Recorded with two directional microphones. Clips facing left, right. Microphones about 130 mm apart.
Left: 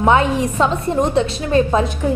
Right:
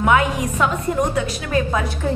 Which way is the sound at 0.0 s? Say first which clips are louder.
Left 3 dB; 30° left (ahead or behind).